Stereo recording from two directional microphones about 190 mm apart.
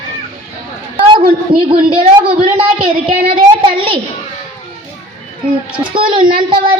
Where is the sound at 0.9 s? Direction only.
25° right (ahead or behind).